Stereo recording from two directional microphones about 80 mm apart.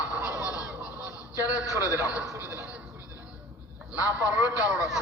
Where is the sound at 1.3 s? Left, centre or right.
Left.